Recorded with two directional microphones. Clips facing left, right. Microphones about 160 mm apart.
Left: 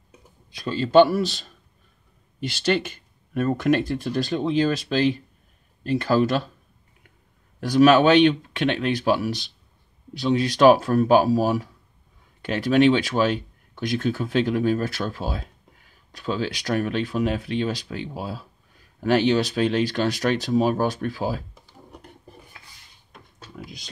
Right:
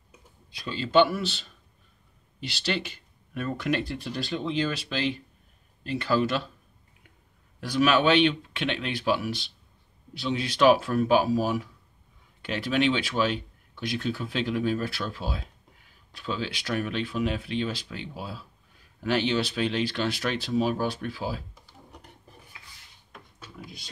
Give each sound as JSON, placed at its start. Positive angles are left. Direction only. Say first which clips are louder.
{"t": 0.5, "sound": "speech", "louder": "left 6 dB", "side_deg": 45}
{"t": 7.6, "sound": "speech", "louder": "left 7 dB", "side_deg": 45}